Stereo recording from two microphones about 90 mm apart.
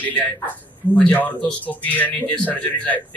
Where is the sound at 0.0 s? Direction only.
20° left (ahead or behind).